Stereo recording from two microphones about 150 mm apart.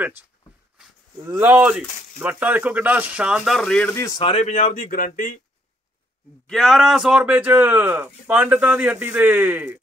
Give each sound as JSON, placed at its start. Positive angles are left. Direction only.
{"t": 1.2, "sound": "speech", "side_deg": -15}
{"t": 4.2, "sound": "speech", "side_deg": 40}
{"t": 6.4, "sound": "speech", "side_deg": 0}